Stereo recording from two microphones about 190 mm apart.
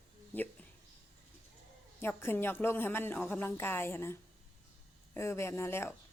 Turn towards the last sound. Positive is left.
turn(degrees=15)  # may be behind; listen again after turning